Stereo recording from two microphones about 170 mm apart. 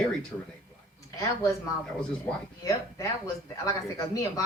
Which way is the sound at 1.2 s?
15° left (ahead or behind).